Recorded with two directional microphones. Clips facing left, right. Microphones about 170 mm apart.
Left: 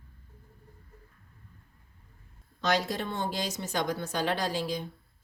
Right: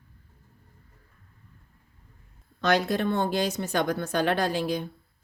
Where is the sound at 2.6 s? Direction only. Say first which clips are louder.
Right 5 dB; 60° right (ahead or behind).